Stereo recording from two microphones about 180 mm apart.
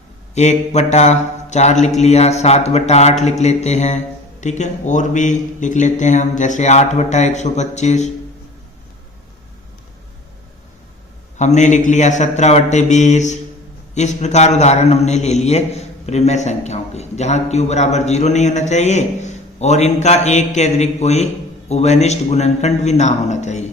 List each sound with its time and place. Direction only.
0.3 s a man's voice: 40° left (ahead or behind)
11.3 s a man's voice: 40° left (ahead or behind)